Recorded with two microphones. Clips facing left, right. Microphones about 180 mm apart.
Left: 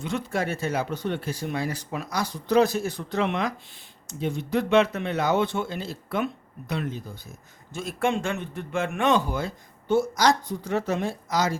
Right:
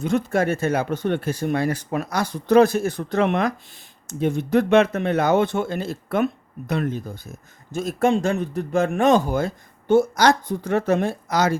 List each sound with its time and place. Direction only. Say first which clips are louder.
0.0 s a man's voice: right 7 dB; 45° right (ahead or behind)
9.9 s speech: right 5 dB; 60° right (ahead or behind)